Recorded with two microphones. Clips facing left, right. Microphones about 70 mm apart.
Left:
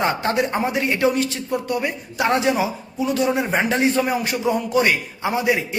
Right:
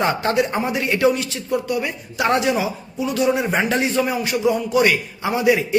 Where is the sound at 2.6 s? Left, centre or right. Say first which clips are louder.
Left 1 dB; left.